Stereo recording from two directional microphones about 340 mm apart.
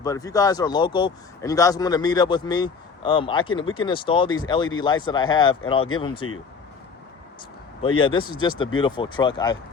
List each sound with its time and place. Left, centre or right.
0.0 s speech: centre
6.2 s speech: left
7.8 s speech: centre